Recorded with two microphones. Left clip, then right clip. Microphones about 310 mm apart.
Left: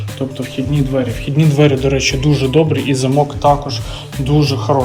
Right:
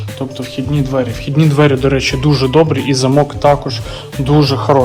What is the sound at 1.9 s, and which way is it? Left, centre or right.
Speech, centre.